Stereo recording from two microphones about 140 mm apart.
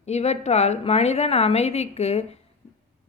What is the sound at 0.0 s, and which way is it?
A woman's voice, 50° left (ahead or behind).